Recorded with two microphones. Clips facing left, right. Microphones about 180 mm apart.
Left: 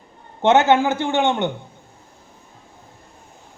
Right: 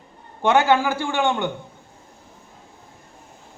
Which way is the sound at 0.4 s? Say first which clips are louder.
Left 3 dB; 20° left (ahead or behind).